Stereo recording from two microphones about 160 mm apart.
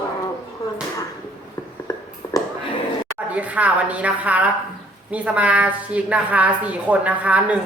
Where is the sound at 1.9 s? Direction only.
20° left (ahead or behind).